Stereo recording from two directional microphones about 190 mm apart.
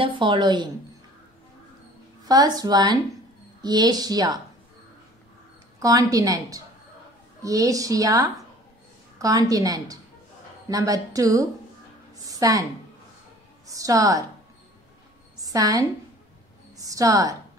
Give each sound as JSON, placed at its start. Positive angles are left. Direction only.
{"t": 0.0, "sound": "a woman's voice", "side_deg": -25}
{"t": 2.2, "sound": "a woman's voice", "side_deg": -20}
{"t": 5.8, "sound": "a woman's voice", "side_deg": -20}
{"t": 13.7, "sound": "a woman's voice", "side_deg": -20}
{"t": 15.4, "sound": "a woman's voice", "side_deg": -20}